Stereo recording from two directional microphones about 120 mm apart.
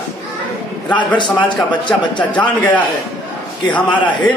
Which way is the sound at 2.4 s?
10° left (ahead or behind).